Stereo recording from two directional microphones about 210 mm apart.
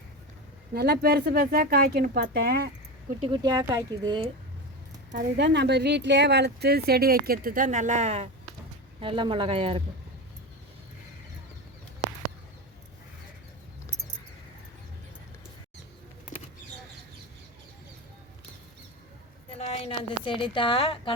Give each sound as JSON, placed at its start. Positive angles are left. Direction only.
{"t": 0.7, "sound": "a woman's voice", "side_deg": -50}
{"t": 3.2, "sound": "speech", "side_deg": -25}
{"t": 5.1, "sound": "a woman's voice", "side_deg": -55}
{"t": 19.5, "sound": "a sound", "side_deg": 30}